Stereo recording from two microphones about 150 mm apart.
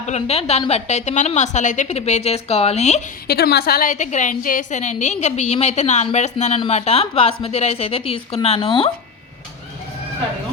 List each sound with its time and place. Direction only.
0.0 s speech: 45° left (ahead or behind)
3.2 s a woman's voice: 90° left
3.9 s a woman's voice: 55° left (ahead or behind); by 8.9 s 35° left (ahead or behind)